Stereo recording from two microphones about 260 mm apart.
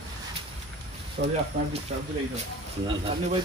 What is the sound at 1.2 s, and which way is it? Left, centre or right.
Speech, right.